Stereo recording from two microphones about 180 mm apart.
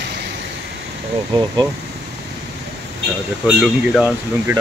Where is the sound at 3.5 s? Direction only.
5° right (ahead or behind).